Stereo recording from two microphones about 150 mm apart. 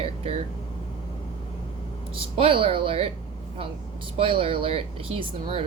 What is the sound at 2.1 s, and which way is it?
Speech, 40° right (ahead or behind).